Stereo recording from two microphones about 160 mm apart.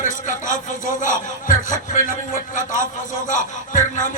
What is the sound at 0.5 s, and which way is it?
A man's voice, 55° left (ahead or behind).